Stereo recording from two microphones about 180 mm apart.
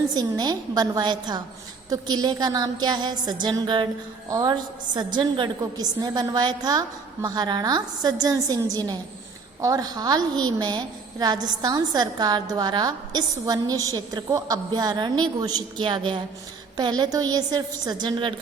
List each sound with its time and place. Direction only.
0.1 s a woman's voice: 20° right (ahead or behind)